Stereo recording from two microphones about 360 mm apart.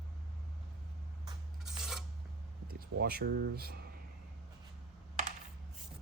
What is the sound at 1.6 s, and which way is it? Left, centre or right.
Filing, centre.